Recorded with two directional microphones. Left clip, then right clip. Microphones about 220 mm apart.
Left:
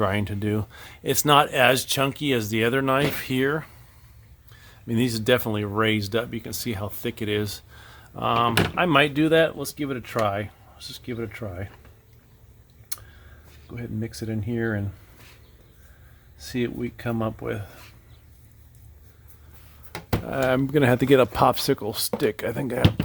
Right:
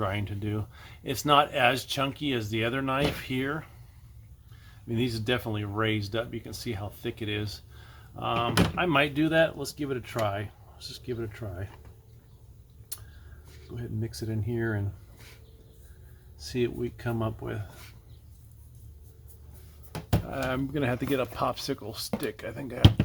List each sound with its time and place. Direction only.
0.0 s speech: 55° left (ahead or behind)
4.9 s speech: 55° left (ahead or behind); by 11.7 s 35° left (ahead or behind)
13.7 s speech: 30° left (ahead or behind)
16.4 s speech: 35° left (ahead or behind)
20.2 s speech: 55° left (ahead or behind)